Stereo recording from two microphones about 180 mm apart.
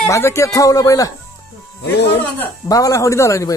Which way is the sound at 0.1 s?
15° left (ahead or behind).